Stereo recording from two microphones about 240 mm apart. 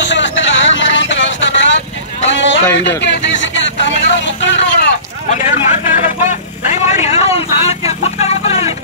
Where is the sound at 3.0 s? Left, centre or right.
Left.